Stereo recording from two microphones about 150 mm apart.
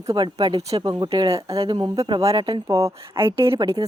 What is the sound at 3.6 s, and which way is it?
Speech, 30° right (ahead or behind).